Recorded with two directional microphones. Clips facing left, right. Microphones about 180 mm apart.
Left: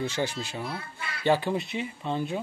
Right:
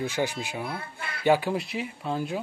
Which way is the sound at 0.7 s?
55° right (ahead or behind).